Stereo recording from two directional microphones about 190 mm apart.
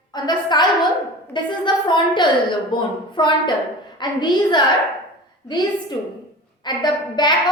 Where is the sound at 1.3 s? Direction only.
25° left (ahead or behind).